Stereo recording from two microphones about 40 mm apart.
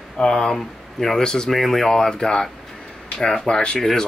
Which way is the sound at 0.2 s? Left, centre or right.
Centre.